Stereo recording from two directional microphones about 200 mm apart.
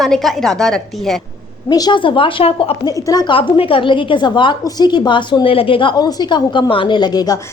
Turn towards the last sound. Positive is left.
turn(degrees=20)  # may be behind; listen again after turning